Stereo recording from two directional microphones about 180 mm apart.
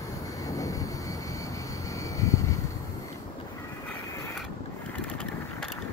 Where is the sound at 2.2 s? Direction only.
15° left (ahead or behind).